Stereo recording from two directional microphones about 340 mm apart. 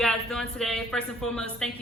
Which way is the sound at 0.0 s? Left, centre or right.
Centre.